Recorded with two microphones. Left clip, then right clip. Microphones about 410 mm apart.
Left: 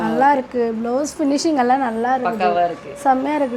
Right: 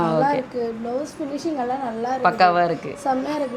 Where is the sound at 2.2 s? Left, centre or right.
Right.